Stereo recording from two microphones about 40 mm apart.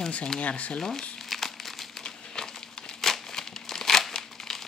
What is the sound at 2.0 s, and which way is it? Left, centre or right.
Crumpling, centre.